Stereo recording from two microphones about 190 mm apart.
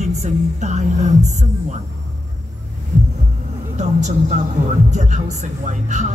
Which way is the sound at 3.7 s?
40° right (ahead or behind).